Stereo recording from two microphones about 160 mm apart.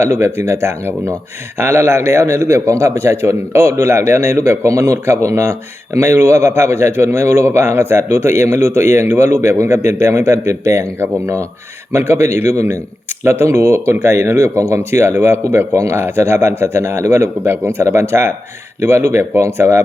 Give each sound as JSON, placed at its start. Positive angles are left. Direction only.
{"t": 0.0, "sound": "a man's voice", "side_deg": -15}